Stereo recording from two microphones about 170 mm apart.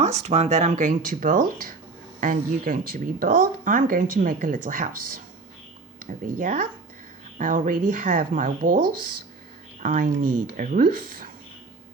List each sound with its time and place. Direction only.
0.0 s speech: 40° right (ahead or behind)
6.0 s speech: 50° right (ahead or behind)
9.8 s speech: 50° right (ahead or behind)